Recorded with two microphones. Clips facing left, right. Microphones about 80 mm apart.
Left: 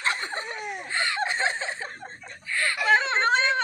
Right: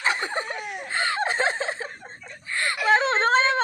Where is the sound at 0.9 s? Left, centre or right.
Right.